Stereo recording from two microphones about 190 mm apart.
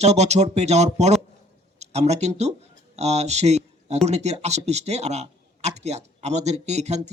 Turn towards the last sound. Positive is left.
turn(degrees=-35)  # may be behind; listen again after turning